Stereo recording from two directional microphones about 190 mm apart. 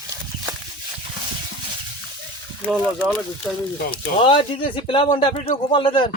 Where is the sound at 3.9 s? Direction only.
25° left (ahead or behind).